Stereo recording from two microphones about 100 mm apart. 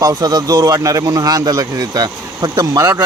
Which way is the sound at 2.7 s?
25° right (ahead or behind).